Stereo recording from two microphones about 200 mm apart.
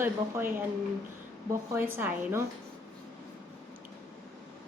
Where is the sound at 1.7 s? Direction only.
10° right (ahead or behind).